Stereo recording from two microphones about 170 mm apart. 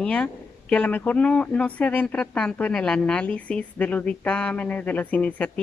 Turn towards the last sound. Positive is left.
turn(degrees=10)  # may be behind; listen again after turning